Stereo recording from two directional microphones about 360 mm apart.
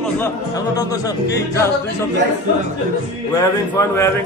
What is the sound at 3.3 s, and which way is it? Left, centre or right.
Speech, centre.